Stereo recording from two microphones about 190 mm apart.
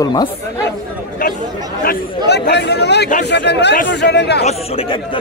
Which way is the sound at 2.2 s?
60° left (ahead or behind).